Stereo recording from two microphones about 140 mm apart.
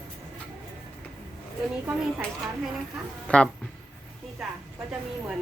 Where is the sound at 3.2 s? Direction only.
10° left (ahead or behind).